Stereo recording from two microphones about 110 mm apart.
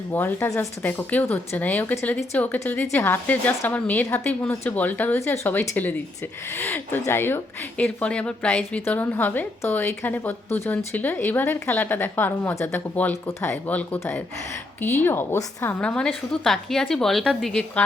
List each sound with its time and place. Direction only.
0.1 s a woman's voice: 20° left (ahead or behind)
15.8 s a woman's voice: 10° left (ahead or behind)